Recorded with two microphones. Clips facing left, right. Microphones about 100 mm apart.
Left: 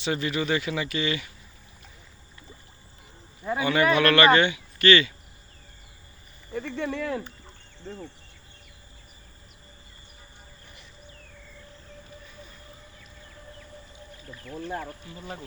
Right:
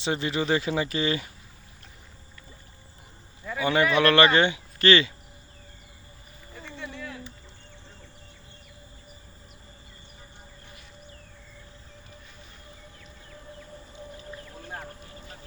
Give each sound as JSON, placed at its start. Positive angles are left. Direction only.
{"t": 0.0, "sound": "speech", "side_deg": -30}
{"t": 3.6, "sound": "speech", "side_deg": -30}
{"t": 6.5, "sound": "speech", "side_deg": 65}